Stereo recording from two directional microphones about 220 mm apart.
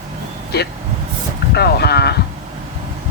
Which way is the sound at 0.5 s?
45° left (ahead or behind).